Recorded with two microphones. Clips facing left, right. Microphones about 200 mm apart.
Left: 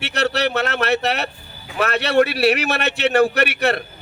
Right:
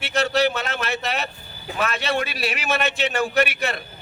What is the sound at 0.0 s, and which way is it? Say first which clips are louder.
A man's voice: even; 70° left (ahead or behind).